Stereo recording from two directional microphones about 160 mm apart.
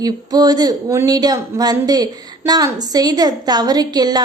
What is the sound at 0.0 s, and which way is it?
Speech, 25° right (ahead or behind).